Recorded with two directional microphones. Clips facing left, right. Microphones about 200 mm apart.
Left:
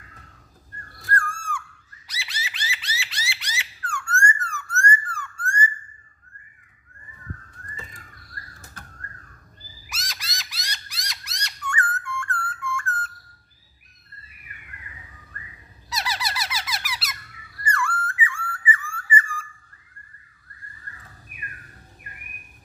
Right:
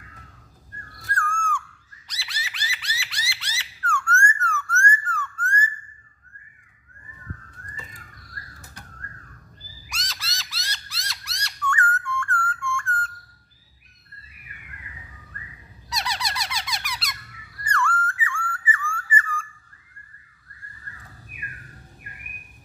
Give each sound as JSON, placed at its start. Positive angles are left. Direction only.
{"t": 1.1, "sound": "owl", "side_deg": 10}
{"t": 2.2, "sound": "a sound", "side_deg": 25}
{"t": 9.8, "sound": "a sound", "side_deg": 10}
{"t": 12.4, "sound": "whistle", "side_deg": 5}
{"t": 15.9, "sound": "squeak", "side_deg": 5}
{"t": 17.6, "sound": "whistle", "side_deg": 10}